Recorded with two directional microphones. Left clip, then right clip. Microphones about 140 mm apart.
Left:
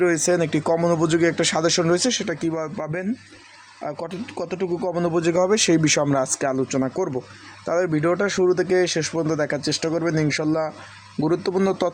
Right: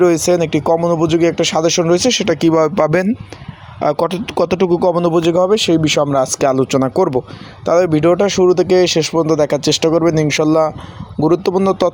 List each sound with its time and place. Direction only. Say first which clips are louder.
0.0 s speech: right 7 dB; 20° right (ahead or behind); by 4.9 s 45° right (ahead or behind)
5.3 s speech: right 4 dB; 15° right (ahead or behind); by 7.2 s 45° right (ahead or behind)
7.6 s speech: right 9 dB; 30° right (ahead or behind)